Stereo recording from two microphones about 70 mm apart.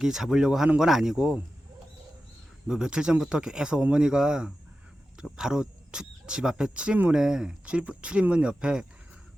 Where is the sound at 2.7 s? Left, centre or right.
Centre.